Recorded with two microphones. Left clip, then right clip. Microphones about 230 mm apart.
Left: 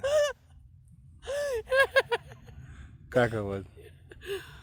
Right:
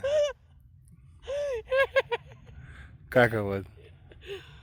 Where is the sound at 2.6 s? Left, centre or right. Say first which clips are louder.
Right 4 dB; right.